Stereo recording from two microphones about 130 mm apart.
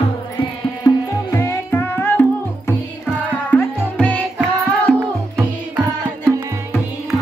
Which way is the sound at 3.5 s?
10° left (ahead or behind).